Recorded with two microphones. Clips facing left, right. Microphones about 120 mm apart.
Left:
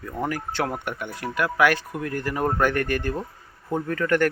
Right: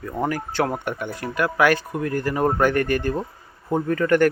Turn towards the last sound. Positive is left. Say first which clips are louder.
# right 4 dB
turn(degrees=-5)  # may be behind; listen again after turning